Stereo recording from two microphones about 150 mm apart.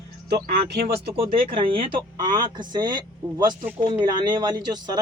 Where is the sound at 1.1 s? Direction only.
35° right (ahead or behind).